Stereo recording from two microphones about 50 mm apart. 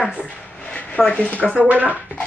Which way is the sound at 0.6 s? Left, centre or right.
Left.